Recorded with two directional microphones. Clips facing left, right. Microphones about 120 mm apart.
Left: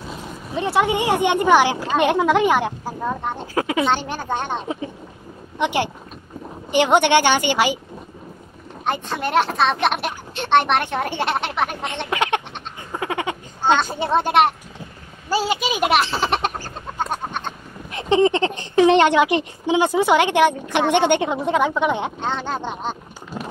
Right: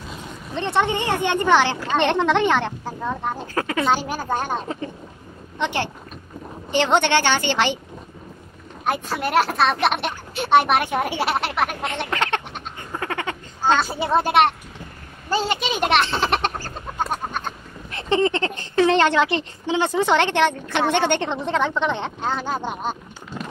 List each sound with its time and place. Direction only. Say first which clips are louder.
0.1 s speech: left 3 dB; 5° left (ahead or behind)
3.5 s speech: left 4 dB; 15° left (ahead or behind)
3.8 s speech: even; 5° right (ahead or behind)
4.6 s speech: left 2 dB; 10° left (ahead or behind)
8.8 s speech: even; 5° right (ahead or behind)
12.1 s speech: left 4 dB; 15° left (ahead or behind)
12.9 s a sound: left 3 dB; 15° left (ahead or behind)
13.7 s speech: even; 5° right (ahead or behind)
17.0 s chicken: even; 5° right (ahead or behind)
17.9 s speech: left 3 dB; 15° left (ahead or behind)
22.2 s speech: even; 5° right (ahead or behind)